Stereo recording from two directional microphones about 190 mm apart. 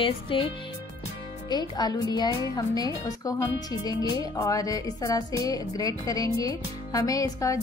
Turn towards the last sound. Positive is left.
turn(degrees=20)  # may be behind; listen again after turning